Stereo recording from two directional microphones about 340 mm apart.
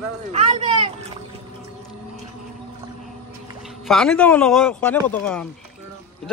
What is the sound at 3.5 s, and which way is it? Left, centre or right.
Speech, centre.